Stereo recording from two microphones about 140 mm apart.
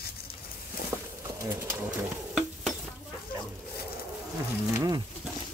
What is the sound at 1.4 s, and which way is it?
Speech, 20° right (ahead or behind).